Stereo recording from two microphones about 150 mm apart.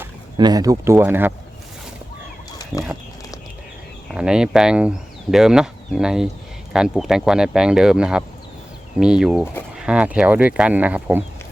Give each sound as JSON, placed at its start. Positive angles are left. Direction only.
{"t": 0.3, "sound": "speech", "side_deg": -25}
{"t": 2.5, "sound": "fowl", "side_deg": 25}
{"t": 4.1, "sound": "speech", "side_deg": -5}